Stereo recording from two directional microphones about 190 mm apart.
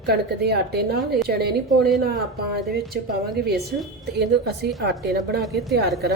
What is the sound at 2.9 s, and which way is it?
A woman's voice, 55° right (ahead or behind).